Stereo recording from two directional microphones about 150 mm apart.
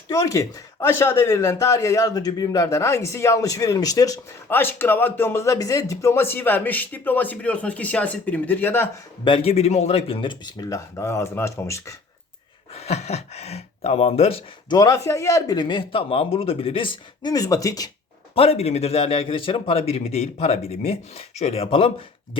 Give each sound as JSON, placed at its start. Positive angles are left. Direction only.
{"t": 0.1, "sound": "speech", "side_deg": 20}
{"t": 9.2, "sound": "speech", "side_deg": 40}
{"t": 12.7, "sound": "speech", "side_deg": 45}
{"t": 14.8, "sound": "speech", "side_deg": 20}
{"t": 18.3, "sound": "a man's voice", "side_deg": 45}